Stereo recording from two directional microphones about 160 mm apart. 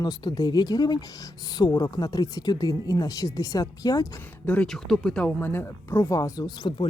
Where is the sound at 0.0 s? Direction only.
25° left (ahead or behind).